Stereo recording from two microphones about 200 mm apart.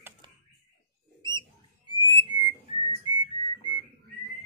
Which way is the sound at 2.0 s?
20° right (ahead or behind).